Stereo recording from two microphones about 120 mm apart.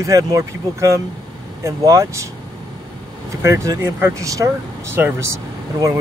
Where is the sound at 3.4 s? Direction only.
25° right (ahead or behind).